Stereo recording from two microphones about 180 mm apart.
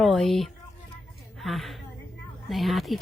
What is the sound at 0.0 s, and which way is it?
A woman's voice, centre (ahead or behind).